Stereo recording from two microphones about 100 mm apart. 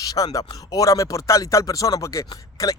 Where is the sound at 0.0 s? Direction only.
35° left (ahead or behind).